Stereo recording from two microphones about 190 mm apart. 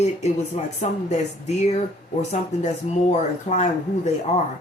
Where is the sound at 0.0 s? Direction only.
35° left (ahead or behind).